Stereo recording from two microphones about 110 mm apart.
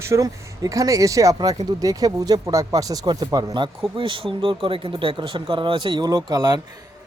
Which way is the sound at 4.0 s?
50° right (ahead or behind).